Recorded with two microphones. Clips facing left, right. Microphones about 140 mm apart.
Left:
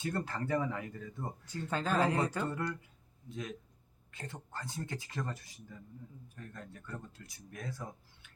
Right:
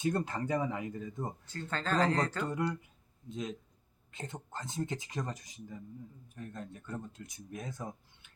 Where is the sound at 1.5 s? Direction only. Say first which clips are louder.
Left 2 dB; 10° left (ahead or behind).